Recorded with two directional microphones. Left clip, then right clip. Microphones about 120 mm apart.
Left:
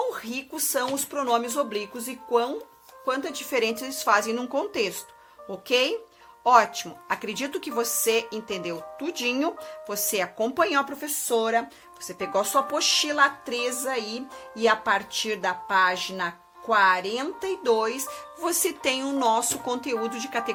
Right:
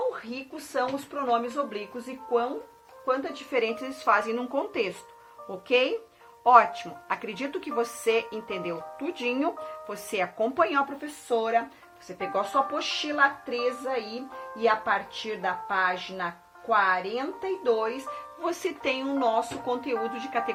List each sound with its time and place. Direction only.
0.1 s speech: 90° left
3.5 s a woman's voice: 50° left (ahead or behind); by 18.0 s 70° left (ahead or behind)
18.4 s speech: 45° left (ahead or behind); by 20.2 s 65° left (ahead or behind)